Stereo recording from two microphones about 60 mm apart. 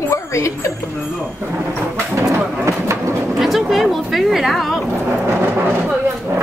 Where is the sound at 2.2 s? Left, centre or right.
Right.